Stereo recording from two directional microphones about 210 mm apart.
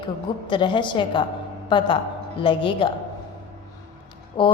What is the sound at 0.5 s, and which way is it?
A woman's voice, 20° left (ahead or behind).